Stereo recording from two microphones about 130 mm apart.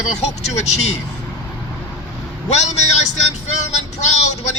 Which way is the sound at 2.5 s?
60° left (ahead or behind).